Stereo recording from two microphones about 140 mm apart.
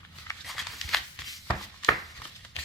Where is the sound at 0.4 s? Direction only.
Centre (ahead or behind).